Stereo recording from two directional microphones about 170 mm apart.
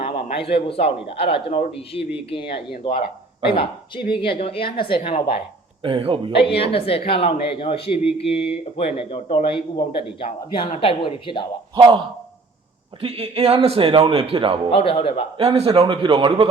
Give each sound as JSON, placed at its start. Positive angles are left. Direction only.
{"t": 0.0, "sound": "speech", "side_deg": 30}
{"t": 4.1, "sound": "speech", "side_deg": 30}
{"t": 5.8, "sound": "speech", "side_deg": -30}
{"t": 6.3, "sound": "speech", "side_deg": 35}
{"t": 11.7, "sound": "speech", "side_deg": -25}
{"t": 14.7, "sound": "speech", "side_deg": 35}
{"t": 15.4, "sound": "speech", "side_deg": -35}